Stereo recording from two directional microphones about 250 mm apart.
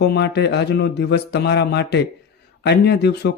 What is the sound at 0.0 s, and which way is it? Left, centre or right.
Speech, left.